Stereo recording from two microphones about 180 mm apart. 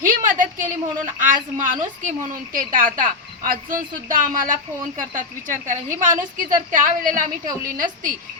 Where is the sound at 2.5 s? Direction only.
50° right (ahead or behind).